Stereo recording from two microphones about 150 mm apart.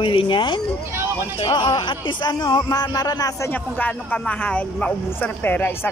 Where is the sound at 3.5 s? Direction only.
10° left (ahead or behind).